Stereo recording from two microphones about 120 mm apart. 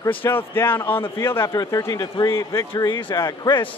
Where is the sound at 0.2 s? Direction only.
15° left (ahead or behind).